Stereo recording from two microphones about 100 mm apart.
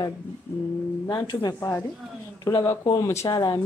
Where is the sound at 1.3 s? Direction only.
40° left (ahead or behind).